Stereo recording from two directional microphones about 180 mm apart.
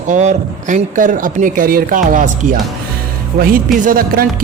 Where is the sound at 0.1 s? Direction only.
40° right (ahead or behind).